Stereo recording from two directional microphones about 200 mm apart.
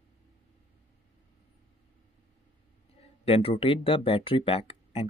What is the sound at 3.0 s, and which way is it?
Speech, 30° left (ahead or behind).